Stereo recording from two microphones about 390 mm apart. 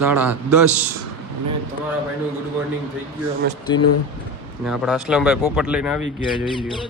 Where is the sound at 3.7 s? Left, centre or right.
Left.